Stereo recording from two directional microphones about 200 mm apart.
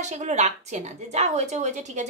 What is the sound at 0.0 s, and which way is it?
Speech, 35° right (ahead or behind).